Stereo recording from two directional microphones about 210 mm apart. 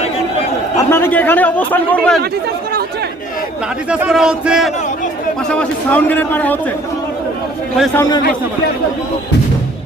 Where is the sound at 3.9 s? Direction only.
5° right (ahead or behind).